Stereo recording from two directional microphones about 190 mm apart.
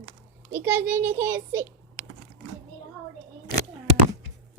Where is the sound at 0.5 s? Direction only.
10° right (ahead or behind).